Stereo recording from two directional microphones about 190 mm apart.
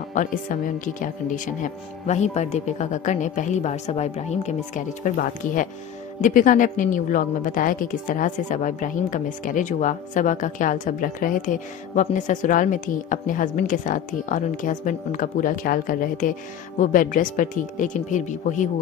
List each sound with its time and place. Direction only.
0.1 s a woman's voice: 45° left (ahead or behind)